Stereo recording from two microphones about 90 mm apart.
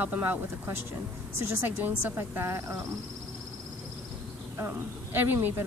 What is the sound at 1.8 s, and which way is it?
A woman's voice, 20° right (ahead or behind).